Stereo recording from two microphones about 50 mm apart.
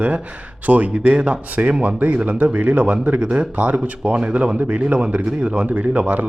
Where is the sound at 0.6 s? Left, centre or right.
Right.